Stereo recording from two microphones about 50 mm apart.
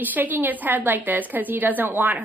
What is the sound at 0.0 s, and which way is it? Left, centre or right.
A woman's voice, right.